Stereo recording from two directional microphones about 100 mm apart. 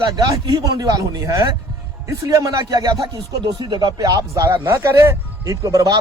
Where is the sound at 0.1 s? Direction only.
40° right (ahead or behind).